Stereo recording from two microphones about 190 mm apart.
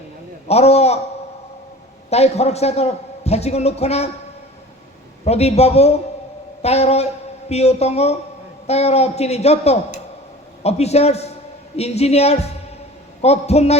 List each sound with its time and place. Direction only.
0.4 s a man's voice: 35° left (ahead or behind)
2.0 s a man's voice: 35° left (ahead or behind)
5.2 s a man's voice: 35° left (ahead or behind)